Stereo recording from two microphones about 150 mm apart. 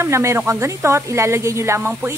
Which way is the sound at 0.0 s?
20° right (ahead or behind).